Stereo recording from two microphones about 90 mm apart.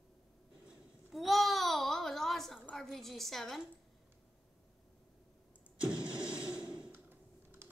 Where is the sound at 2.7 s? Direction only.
5° left (ahead or behind).